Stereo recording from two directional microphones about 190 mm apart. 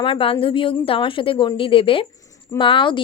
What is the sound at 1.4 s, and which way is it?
Speech, 25° left (ahead or behind).